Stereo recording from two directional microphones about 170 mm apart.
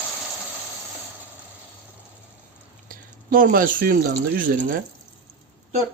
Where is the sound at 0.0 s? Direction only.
10° left (ahead or behind).